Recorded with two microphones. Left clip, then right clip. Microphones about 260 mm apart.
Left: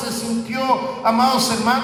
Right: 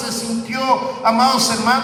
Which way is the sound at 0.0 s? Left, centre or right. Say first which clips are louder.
Right 1 dB; right.